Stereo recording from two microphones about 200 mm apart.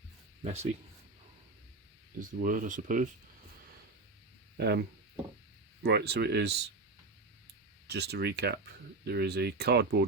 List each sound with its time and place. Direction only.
0.4 s speech: 35° right (ahead or behind)
2.1 s speech: 40° right (ahead or behind)
4.6 s speech: 55° right (ahead or behind)
7.9 s speech: 55° right (ahead or behind)